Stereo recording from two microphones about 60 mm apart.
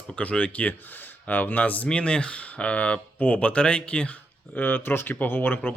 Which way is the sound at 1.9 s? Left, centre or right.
Centre.